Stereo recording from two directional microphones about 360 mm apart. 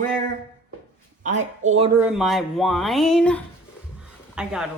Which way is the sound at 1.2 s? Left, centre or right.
Centre.